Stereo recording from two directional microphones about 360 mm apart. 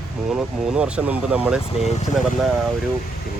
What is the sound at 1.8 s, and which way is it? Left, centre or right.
Speech, centre.